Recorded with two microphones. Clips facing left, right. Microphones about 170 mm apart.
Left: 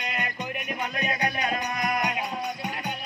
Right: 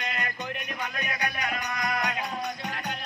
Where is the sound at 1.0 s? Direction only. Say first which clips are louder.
Left 5 dB; 25° left (ahead or behind).